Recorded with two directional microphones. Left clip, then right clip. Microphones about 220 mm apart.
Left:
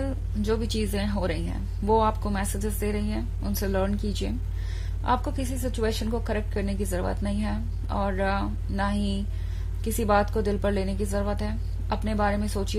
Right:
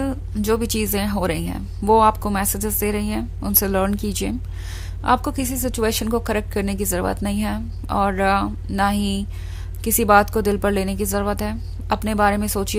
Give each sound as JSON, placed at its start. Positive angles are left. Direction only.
{"t": 0.0, "sound": "a woman's voice", "side_deg": -35}